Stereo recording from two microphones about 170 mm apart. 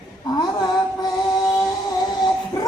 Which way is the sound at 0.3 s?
25° left (ahead or behind).